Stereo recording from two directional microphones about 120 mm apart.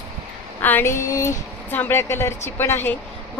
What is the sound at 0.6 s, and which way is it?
Speech, 20° left (ahead or behind).